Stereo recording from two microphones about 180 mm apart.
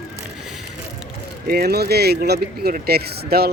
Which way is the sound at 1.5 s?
60° right (ahead or behind).